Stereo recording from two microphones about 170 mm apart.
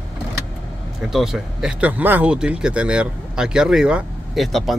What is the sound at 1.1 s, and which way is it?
Speech, centre (ahead or behind).